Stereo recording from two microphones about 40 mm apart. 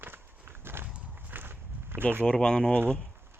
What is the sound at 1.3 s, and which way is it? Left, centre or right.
Walk, right.